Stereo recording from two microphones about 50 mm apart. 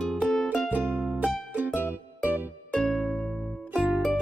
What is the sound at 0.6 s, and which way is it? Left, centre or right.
Music, right.